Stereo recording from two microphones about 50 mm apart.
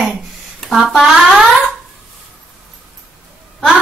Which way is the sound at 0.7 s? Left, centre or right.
Centre.